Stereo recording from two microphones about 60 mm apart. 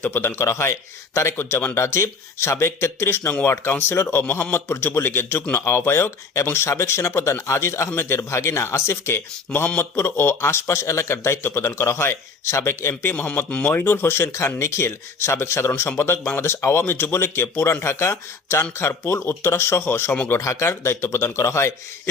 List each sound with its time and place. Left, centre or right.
0.1 s a man's voice: left
13.1 s speech: left
13.7 s speech: left
20.4 s speech: left